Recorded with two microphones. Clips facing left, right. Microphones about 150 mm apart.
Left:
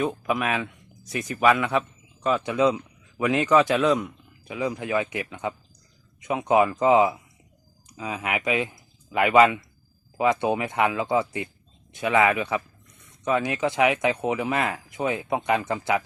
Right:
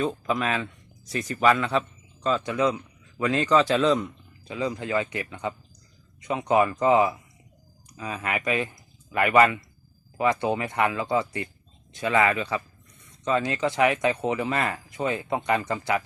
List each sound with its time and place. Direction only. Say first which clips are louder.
0.0 s speech: left 1 dB; 15° left (ahead or behind)